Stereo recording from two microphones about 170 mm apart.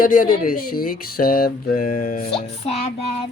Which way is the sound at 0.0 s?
55° left (ahead or behind).